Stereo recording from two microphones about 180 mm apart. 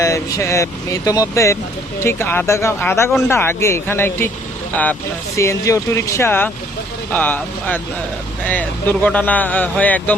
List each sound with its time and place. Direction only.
0.0 s speech: 15° left (ahead or behind)
5.4 s speech: 15° left (ahead or behind)